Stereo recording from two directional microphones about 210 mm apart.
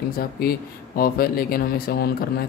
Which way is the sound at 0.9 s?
45° left (ahead or behind).